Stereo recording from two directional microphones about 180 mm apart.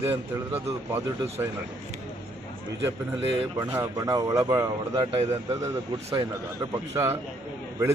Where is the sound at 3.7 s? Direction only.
20° right (ahead or behind).